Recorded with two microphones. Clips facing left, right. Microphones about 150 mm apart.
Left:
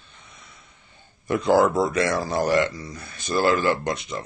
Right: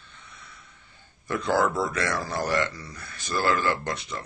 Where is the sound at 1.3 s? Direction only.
20° left (ahead or behind).